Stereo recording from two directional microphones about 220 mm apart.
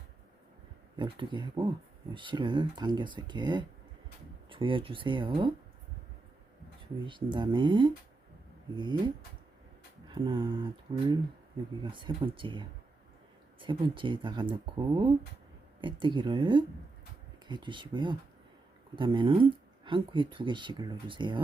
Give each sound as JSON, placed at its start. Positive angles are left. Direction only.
{"t": 0.9, "sound": "speech", "side_deg": -20}
{"t": 7.0, "sound": "speech", "side_deg": -20}
{"t": 10.1, "sound": "speech", "side_deg": -25}